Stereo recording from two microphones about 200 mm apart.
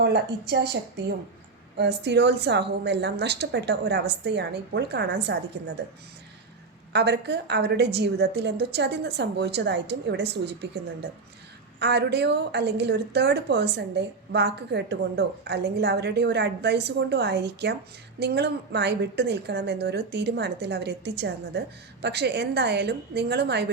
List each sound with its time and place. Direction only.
0.0 s a woman's voice: 55° right (ahead or behind)
6.9 s a woman's voice: 55° right (ahead or behind)